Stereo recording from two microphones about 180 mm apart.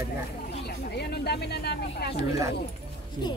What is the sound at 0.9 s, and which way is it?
Speech, 65° left (ahead or behind).